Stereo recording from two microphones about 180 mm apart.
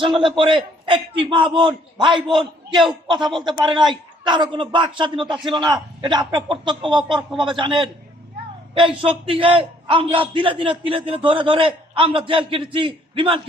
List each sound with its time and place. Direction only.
0.2 s a man's voice: 25° right (ahead or behind)
3.2 s speech: centre (ahead or behind)
3.7 s a man's voice: 25° right (ahead or behind)